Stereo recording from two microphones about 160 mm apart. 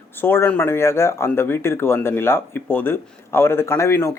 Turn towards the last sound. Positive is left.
turn(degrees=15)  # may be behind; listen again after turning